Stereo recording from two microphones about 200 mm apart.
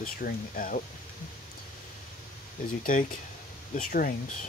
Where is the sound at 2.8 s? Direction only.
45° left (ahead or behind).